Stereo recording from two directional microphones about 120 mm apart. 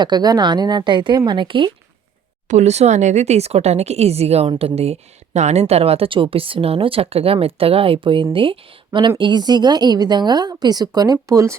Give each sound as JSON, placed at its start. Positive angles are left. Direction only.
{"t": 0.0, "sound": "a woman's voice", "side_deg": -35}
{"t": 2.5, "sound": "speech", "side_deg": -75}